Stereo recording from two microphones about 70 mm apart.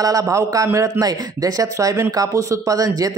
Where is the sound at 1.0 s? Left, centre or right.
Right.